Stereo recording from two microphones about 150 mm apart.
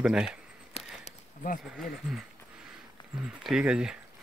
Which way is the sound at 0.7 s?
60° left (ahead or behind).